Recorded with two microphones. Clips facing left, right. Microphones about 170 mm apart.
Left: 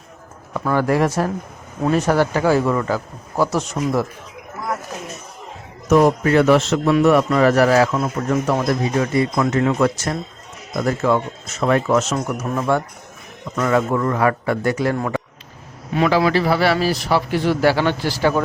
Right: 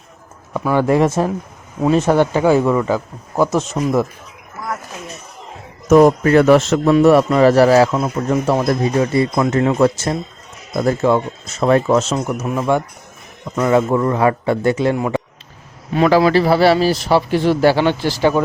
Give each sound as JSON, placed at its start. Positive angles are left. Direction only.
{"t": 0.5, "sound": "speech", "side_deg": -15}
{"t": 5.9, "sound": "a man's voice", "side_deg": -45}
{"t": 6.9, "sound": "speech", "side_deg": -35}
{"t": 7.9, "sound": "speech", "side_deg": -15}
{"t": 8.6, "sound": "speech", "side_deg": -40}
{"t": 12.5, "sound": "speech", "side_deg": -15}
{"t": 16.0, "sound": "speech", "side_deg": -40}